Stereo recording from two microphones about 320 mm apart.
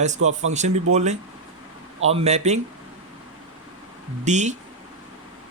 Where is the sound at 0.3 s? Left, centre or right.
Right.